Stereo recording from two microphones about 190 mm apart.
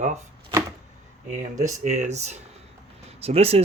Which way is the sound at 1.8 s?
35° right (ahead or behind).